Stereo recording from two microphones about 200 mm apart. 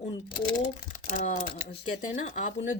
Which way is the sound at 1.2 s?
40° left (ahead or behind).